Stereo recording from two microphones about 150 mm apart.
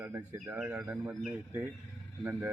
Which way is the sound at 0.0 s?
15° right (ahead or behind).